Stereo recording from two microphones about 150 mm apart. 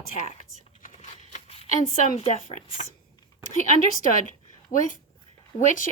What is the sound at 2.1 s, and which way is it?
Speech, 40° left (ahead or behind).